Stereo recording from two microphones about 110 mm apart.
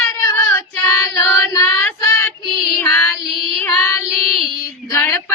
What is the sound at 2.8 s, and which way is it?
Female singing, 25° left (ahead or behind).